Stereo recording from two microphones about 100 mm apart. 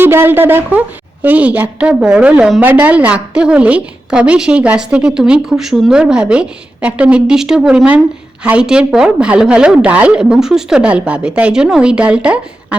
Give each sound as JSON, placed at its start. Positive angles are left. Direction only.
{"t": 0.0, "sound": "a woman's voice", "side_deg": -20}